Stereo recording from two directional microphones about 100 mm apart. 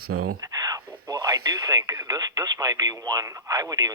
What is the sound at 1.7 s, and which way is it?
Speech, 35° right (ahead or behind).